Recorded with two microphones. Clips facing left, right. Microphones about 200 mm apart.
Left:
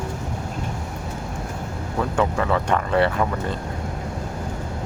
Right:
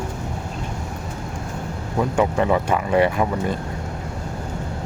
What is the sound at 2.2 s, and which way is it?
Speech, 15° right (ahead or behind).